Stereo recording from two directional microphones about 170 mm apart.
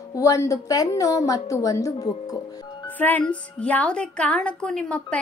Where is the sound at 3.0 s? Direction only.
10° left (ahead or behind).